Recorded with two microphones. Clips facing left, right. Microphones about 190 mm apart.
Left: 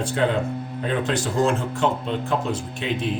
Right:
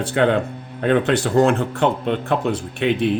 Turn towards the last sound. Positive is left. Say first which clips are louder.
# right 7 dB
turn(degrees=-65)  # may be behind; listen again after turning